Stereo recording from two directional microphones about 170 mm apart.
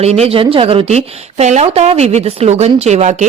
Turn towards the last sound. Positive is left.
turn(degrees=-40)  # may be behind; listen again after turning